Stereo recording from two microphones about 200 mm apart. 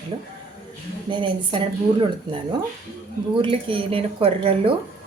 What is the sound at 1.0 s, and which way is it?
A woman's voice, 25° right (ahead or behind).